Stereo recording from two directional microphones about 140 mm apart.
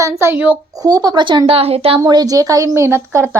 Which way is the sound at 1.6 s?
45° right (ahead or behind).